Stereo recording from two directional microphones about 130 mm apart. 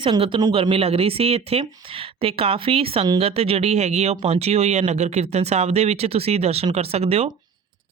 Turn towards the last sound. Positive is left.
turn(degrees=-50)  # may be behind; listen again after turning